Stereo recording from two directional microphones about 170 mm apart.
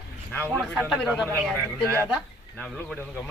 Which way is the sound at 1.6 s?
15° right (ahead or behind).